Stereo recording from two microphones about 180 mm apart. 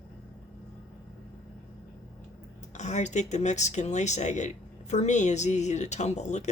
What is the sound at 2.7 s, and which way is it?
Speech, 40° left (ahead or behind).